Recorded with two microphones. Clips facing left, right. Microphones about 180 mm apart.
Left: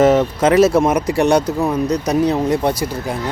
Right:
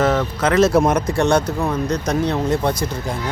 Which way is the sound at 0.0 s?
25° left (ahead or behind).